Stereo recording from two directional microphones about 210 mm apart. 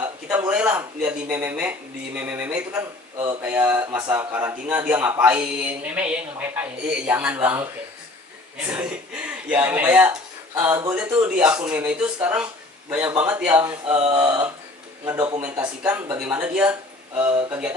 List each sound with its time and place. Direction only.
0.3 s a man's voice: 5° right (ahead or behind)
8.6 s a man's voice: 5° right (ahead or behind)
15.4 s a man's voice: 5° right (ahead or behind)